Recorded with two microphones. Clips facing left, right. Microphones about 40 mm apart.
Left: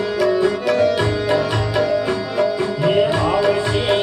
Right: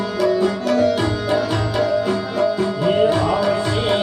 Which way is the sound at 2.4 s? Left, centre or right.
Centre.